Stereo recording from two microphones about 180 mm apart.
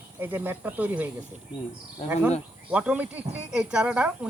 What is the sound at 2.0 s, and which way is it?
Speech, 40° left (ahead or behind).